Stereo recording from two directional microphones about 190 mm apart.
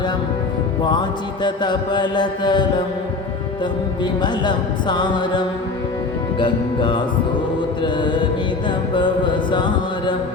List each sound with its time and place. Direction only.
0.9 s music: 25° left (ahead or behind)
4.0 s music: 25° left (ahead or behind)
6.4 s music: 25° left (ahead or behind)